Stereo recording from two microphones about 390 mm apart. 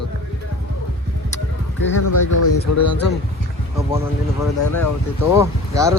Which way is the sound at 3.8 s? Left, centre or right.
Centre.